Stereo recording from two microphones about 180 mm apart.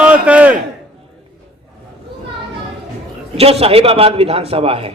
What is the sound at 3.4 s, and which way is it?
A man's voice, 35° right (ahead or behind).